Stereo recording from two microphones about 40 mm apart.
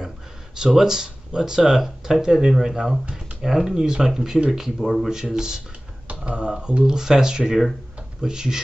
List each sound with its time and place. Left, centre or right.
0.6 s speech: centre
5.1 s speech: centre